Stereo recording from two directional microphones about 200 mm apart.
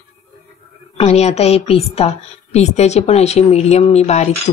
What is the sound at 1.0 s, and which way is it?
A woman's voice, 30° left (ahead or behind).